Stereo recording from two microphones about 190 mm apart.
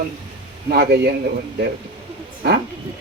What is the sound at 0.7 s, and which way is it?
Speech, 55° right (ahead or behind).